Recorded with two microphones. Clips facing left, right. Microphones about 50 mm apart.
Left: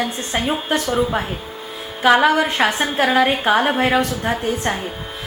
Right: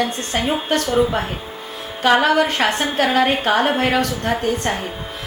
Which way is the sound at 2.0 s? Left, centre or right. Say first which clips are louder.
Left 1 dB; centre.